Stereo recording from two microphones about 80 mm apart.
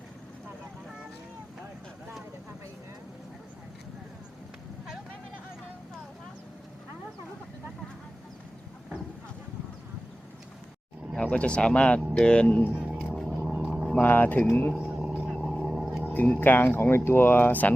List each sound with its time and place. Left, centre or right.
11.2 s speech: centre
12.7 s a sound: centre
13.1 s vehicle: centre
13.5 s vehicle: centre
14.0 s speech: left
14.8 s a sound: centre
15.4 s vehicle: centre
16.1 s speech: centre